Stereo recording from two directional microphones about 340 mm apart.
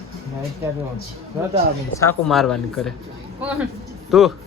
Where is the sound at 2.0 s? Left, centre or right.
Centre.